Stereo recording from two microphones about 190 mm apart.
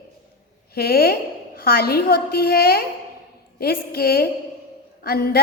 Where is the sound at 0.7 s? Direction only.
55° left (ahead or behind).